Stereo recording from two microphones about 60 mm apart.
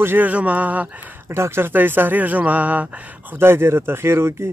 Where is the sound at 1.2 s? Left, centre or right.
Right.